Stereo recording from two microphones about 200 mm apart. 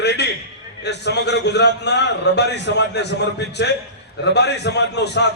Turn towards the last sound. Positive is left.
turn(degrees=60)  # may be behind; listen again after turning